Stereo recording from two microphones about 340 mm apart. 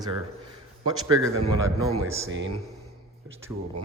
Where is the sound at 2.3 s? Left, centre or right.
Right.